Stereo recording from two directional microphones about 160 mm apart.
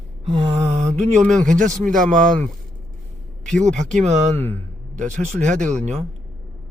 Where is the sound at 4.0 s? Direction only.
45° right (ahead or behind).